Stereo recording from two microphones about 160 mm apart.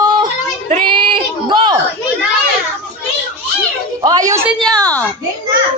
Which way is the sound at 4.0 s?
25° right (ahead or behind).